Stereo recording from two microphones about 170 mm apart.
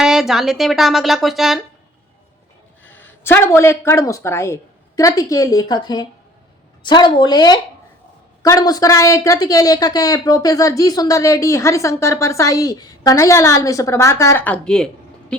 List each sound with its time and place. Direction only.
0.0 s speech: 5° right (ahead or behind)
2.8 s a woman's voice: 10° left (ahead or behind)